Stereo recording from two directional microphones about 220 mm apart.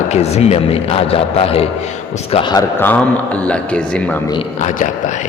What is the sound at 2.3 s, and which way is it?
A man's voice, 20° left (ahead or behind).